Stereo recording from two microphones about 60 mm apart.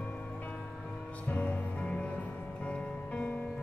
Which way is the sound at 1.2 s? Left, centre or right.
Left.